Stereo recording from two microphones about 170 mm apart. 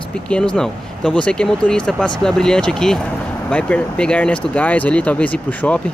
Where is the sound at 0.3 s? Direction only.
5° left (ahead or behind).